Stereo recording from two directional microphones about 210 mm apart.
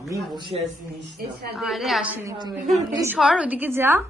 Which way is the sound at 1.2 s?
45° right (ahead or behind).